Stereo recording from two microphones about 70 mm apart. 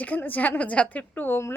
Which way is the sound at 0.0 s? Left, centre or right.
Left.